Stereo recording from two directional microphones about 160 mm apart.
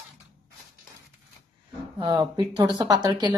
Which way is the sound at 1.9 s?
25° right (ahead or behind).